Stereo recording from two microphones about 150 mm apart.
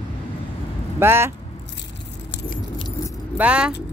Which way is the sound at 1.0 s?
15° right (ahead or behind).